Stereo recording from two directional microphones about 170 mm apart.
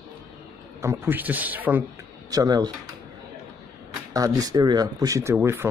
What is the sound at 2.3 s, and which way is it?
Speech, 25° right (ahead or behind).